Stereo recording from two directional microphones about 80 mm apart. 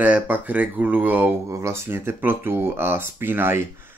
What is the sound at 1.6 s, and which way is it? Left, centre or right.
Speech, right.